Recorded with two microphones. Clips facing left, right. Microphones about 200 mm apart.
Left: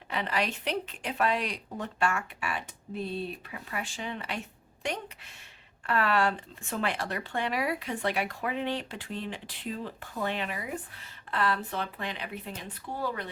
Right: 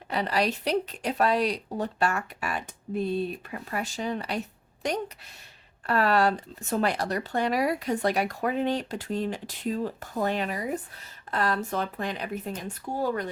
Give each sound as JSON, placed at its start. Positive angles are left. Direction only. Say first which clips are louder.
{"t": 0.1, "sound": "speech", "louder": "right 5 dB", "side_deg": -40}